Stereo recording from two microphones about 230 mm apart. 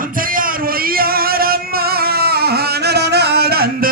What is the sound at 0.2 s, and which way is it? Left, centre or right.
Music, right.